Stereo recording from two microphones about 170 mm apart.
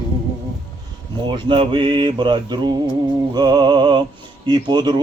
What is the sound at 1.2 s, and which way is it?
Mantra, 25° right (ahead or behind).